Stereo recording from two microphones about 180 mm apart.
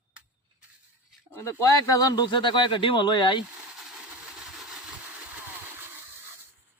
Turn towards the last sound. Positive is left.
turn(degrees=-10)  # may be behind; listen again after turning